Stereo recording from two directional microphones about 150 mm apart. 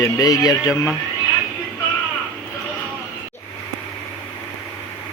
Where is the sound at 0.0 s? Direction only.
25° left (ahead or behind).